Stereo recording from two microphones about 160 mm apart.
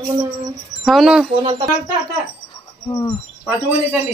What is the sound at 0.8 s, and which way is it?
Speech, centre (ahead or behind).